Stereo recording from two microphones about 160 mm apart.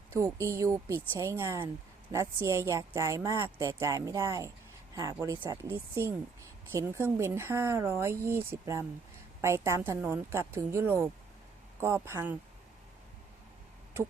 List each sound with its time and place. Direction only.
0.2 s a woman's voice: 15° right (ahead or behind)